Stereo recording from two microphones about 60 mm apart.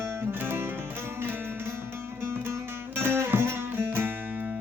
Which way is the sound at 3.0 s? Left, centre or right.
Right.